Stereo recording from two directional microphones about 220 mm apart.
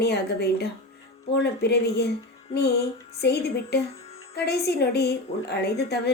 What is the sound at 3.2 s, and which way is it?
A woman's voice, 50° left (ahead or behind).